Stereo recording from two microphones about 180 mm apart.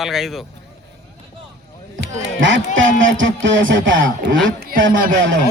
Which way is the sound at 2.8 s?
90° right.